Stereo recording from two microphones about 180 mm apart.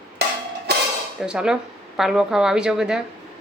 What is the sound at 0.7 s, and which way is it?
Clang, 65° right (ahead or behind).